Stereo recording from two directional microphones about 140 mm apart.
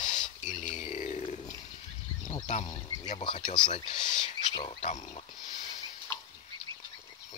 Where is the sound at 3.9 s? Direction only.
55° left (ahead or behind).